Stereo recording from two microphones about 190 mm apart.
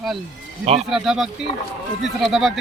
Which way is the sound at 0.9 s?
Centre (ahead or behind).